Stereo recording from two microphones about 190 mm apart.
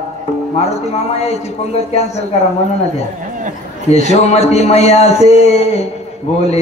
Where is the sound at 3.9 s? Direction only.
35° left (ahead or behind).